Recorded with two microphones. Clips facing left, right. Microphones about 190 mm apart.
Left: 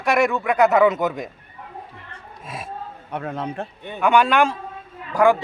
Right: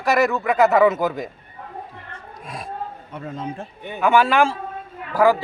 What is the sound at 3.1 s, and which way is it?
Speech, 65° left (ahead or behind).